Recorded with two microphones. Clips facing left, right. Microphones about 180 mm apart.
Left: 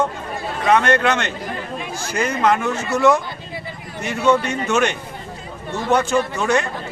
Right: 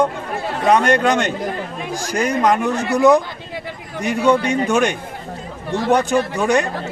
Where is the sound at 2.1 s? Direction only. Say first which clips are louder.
Right 2 dB; 15° right (ahead or behind).